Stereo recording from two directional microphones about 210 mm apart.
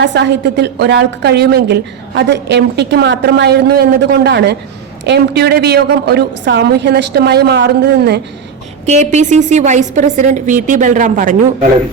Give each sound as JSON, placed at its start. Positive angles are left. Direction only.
{"t": 0.0, "sound": "a woman's voice", "side_deg": -55}
{"t": 8.9, "sound": "a woman's voice", "side_deg": -35}